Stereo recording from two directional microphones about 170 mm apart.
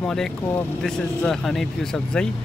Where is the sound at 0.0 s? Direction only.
5° left (ahead or behind).